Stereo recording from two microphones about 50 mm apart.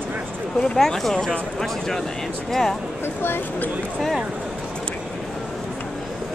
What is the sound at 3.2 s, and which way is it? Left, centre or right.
Speech, left.